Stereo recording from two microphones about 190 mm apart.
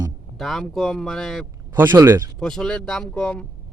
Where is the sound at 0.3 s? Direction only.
Centre (ahead or behind).